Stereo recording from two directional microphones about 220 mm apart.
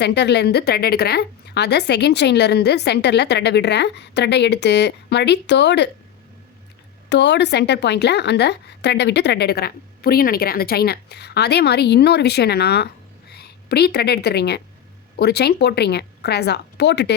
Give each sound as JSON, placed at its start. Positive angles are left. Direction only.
{"t": 0.0, "sound": "a woman's voice", "side_deg": 50}
{"t": 7.1, "sound": "a woman's voice", "side_deg": 50}